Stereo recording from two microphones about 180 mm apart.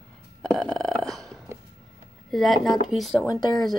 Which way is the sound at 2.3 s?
Centre (ahead or behind).